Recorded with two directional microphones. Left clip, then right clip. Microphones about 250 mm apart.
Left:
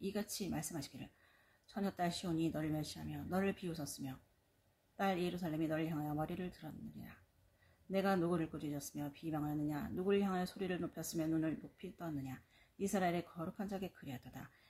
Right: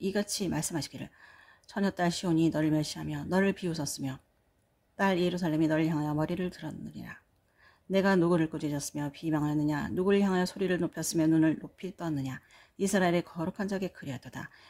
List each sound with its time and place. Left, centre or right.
0.0 s speech: right